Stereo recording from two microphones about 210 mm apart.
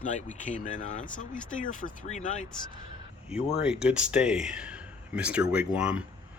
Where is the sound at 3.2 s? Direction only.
5° right (ahead or behind).